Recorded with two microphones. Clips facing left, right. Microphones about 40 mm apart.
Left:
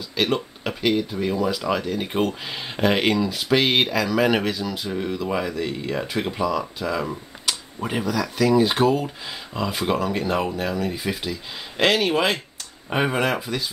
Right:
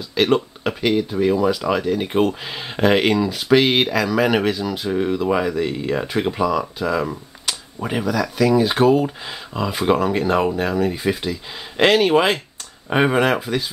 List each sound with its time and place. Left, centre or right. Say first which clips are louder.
0.1 s speech: right 5 dB; centre